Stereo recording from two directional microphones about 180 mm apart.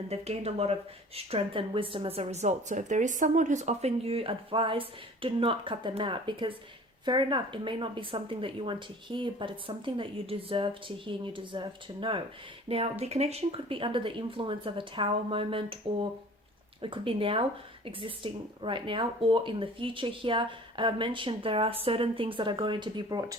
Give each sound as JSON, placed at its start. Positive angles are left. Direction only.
{"t": 0.1, "sound": "speech", "side_deg": -35}